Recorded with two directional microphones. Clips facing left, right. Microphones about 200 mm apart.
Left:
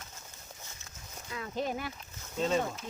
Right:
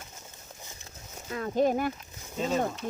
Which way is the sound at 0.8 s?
45° right (ahead or behind).